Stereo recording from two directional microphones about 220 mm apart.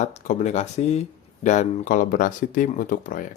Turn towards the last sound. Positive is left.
turn(degrees=35)  # may be behind; listen again after turning